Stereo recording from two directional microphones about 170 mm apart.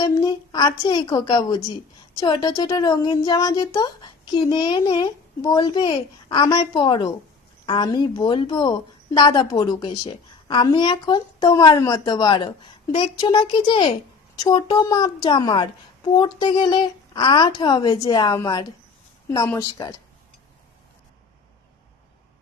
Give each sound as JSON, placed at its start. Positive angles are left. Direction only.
{"t": 0.0, "sound": "a woman's voice", "side_deg": 20}